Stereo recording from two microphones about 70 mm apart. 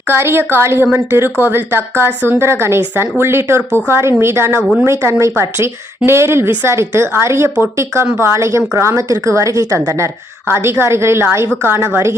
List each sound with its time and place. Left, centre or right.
0.1 s a woman's voice: right